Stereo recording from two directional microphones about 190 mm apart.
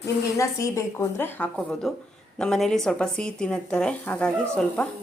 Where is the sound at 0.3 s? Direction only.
15° left (ahead or behind).